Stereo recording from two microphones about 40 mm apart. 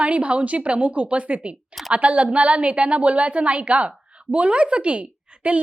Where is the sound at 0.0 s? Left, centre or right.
Right.